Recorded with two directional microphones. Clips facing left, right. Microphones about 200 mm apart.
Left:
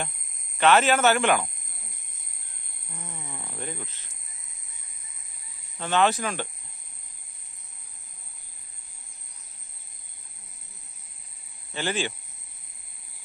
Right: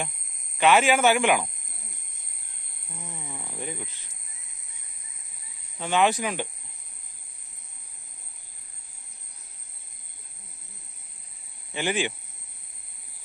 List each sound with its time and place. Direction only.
0.6 s speech: 10° right (ahead or behind)
3.0 s a sound: 10° right (ahead or behind)
5.8 s speech: 10° right (ahead or behind)
11.7 s speech: 15° right (ahead or behind)